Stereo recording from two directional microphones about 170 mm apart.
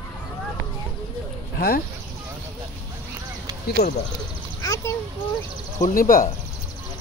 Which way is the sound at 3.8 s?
40° left (ahead or behind).